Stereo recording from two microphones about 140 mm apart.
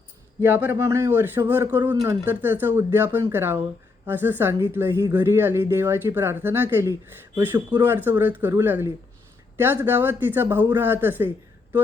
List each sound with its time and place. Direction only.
0.4 s speech: 15° right (ahead or behind)